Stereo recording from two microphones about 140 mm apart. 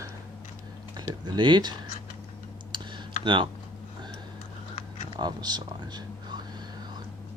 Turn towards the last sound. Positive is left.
turn(degrees=-30)  # may be behind; listen again after turning